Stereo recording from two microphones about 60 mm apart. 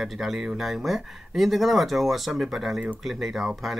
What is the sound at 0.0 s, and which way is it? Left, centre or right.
Speech, centre.